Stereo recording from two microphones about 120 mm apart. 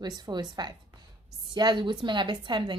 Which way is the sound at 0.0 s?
35° right (ahead or behind).